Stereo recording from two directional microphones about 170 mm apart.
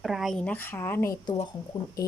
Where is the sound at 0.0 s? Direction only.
Centre (ahead or behind).